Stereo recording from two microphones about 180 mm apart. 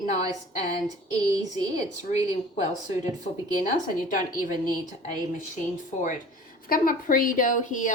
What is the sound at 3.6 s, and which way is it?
Speech, 45° left (ahead or behind).